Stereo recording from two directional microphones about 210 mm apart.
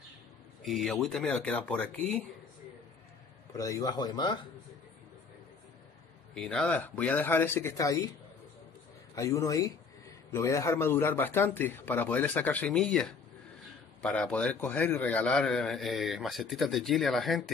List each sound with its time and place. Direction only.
0.6 s a man's voice: centre (ahead or behind)
3.5 s speech: 15° left (ahead or behind)
6.3 s speech: 5° left (ahead or behind)
9.1 s a man's voice: 15° left (ahead or behind)